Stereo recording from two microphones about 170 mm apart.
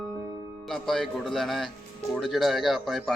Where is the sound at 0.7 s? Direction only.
Centre (ahead or behind).